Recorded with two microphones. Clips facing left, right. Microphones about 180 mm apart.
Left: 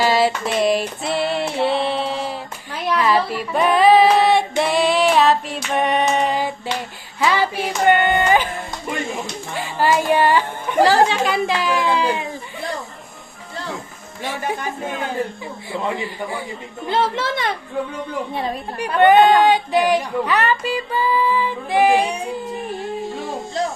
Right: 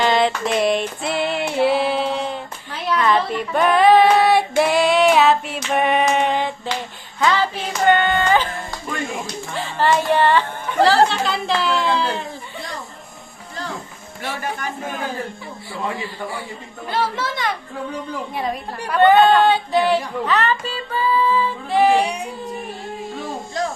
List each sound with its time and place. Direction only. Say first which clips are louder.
0.0 s music: even; 5° left (ahead or behind)
3.0 s female singing: even; 5° left (ahead or behind)
7.2 s music: even; 10° left (ahead or behind)
9.6 s a woman's voice: even; 10° left (ahead or behind)
14.2 s a woman's voice: left 2 dB; 15° left (ahead or behind)
16.9 s a child's voice: left 3 dB; 25° left (ahead or behind)